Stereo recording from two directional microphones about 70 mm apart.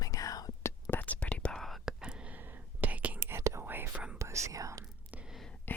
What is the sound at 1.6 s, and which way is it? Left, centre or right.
Whispering, centre.